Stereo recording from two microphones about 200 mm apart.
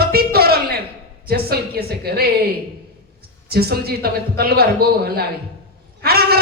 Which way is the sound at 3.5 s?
50° right (ahead or behind).